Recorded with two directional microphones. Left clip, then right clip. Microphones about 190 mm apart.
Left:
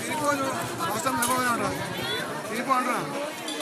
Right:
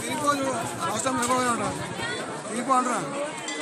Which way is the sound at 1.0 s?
40° right (ahead or behind).